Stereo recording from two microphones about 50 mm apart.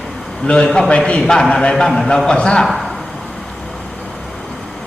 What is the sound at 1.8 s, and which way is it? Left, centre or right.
Speech, centre.